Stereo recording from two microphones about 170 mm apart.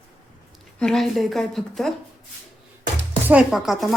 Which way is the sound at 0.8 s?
5° left (ahead or behind).